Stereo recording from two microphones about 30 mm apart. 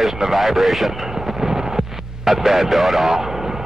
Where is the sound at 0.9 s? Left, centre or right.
Centre.